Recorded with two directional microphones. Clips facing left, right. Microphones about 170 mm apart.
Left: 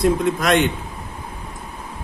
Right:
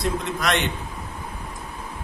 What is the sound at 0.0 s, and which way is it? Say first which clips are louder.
Speech: left 7 dB; 50° left (ahead or behind).